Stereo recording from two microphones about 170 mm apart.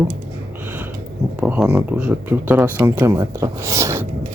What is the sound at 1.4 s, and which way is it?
Speech, 10° right (ahead or behind).